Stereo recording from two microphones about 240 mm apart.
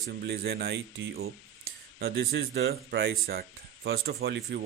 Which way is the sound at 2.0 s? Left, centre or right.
Right.